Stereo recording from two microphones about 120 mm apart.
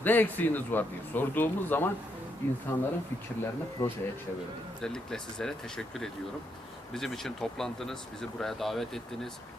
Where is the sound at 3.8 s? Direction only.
15° left (ahead or behind).